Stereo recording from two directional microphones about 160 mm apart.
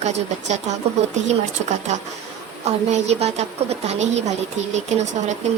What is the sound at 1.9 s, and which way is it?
A woman's voice, 45° right (ahead or behind).